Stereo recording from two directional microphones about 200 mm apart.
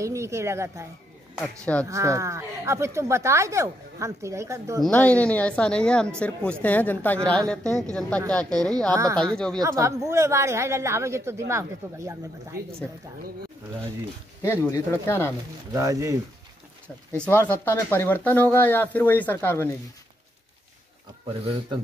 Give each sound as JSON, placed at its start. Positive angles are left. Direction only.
{"t": 0.0, "sound": "speech", "side_deg": -15}
{"t": 1.9, "sound": "speech", "side_deg": -15}
{"t": 4.8, "sound": "speech", "side_deg": 5}
{"t": 8.9, "sound": "speech", "side_deg": -15}
{"t": 9.2, "sound": "speech", "side_deg": 5}
{"t": 9.6, "sound": "speech", "side_deg": -15}
{"t": 14.4, "sound": "speech", "side_deg": 10}
{"t": 15.7, "sound": "speech", "side_deg": -15}
{"t": 17.1, "sound": "speech", "side_deg": 10}
{"t": 21.3, "sound": "speech", "side_deg": -30}